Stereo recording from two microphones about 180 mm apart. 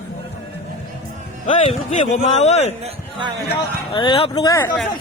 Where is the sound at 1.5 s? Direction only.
40° left (ahead or behind).